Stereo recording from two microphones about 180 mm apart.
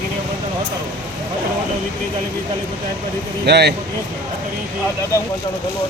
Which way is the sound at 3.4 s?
65° right (ahead or behind).